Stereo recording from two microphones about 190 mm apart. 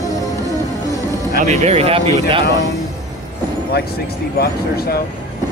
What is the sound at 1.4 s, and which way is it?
Speech, 35° right (ahead or behind).